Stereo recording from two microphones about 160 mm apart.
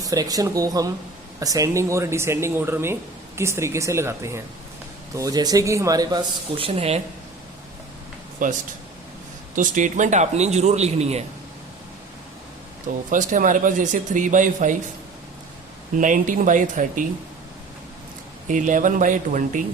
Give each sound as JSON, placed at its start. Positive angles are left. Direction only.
{"t": 0.0, "sound": "speech", "side_deg": -20}
{"t": 8.4, "sound": "speech", "side_deg": -60}
{"t": 9.6, "sound": "speech", "side_deg": -50}
{"t": 13.1, "sound": "speech", "side_deg": -55}
{"t": 16.0, "sound": "speech", "side_deg": -55}
{"t": 18.4, "sound": "speech", "side_deg": -50}